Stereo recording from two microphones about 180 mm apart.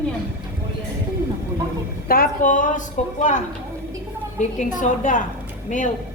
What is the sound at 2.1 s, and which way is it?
A woman's voice, 50° left (ahead or behind).